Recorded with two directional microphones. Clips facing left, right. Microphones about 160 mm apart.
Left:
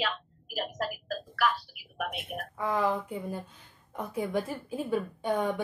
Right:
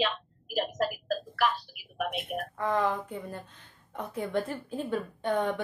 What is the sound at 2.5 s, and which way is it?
A woman's voice, 10° left (ahead or behind).